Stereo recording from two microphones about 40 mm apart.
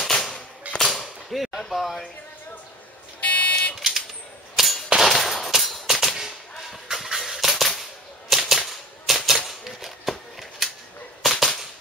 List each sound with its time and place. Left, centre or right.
0.0 s cap gun: centre
1.0 s whip: centre
1.7 s speech: centre
3.2 s vehicle: left
4.6 s clang: centre
5.0 s a sound: centre
8.3 s typewriter: centre
9.4 s a sound: centre
11.2 s cap gun: centre